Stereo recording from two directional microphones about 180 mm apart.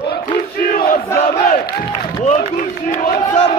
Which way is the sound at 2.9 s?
50° left (ahead or behind).